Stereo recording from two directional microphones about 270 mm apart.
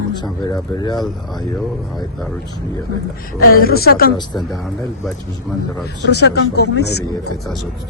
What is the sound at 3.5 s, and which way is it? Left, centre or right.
Speech, left.